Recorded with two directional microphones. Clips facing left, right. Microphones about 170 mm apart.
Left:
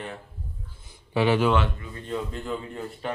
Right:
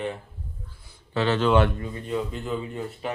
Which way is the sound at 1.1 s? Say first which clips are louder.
Left 2 dB; 10° left (ahead or behind).